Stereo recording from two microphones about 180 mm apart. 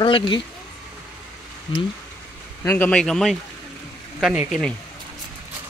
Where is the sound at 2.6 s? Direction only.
10° left (ahead or behind).